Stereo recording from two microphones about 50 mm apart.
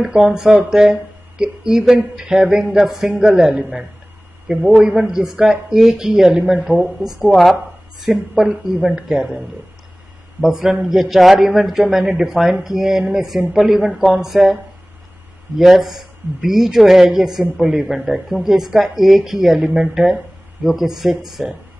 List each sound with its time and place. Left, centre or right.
0.1 s speech: centre
4.5 s a man's voice: right
5.0 s speech: centre
8.0 s speech: centre
15.5 s speech: centre